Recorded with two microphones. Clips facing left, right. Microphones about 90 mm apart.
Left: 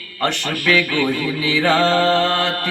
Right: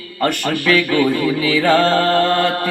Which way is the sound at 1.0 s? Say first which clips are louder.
Right 4 dB; 15° right (ahead or behind).